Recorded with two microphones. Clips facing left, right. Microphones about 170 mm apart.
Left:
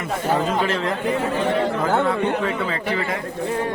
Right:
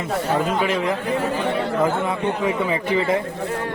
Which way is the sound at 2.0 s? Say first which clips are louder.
Left 1 dB; 15° right (ahead or behind).